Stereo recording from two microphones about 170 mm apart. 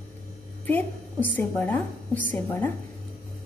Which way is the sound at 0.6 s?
10° left (ahead or behind).